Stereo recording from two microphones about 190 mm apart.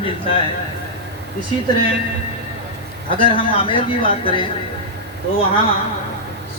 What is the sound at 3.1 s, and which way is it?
A man's voice, 30° left (ahead or behind).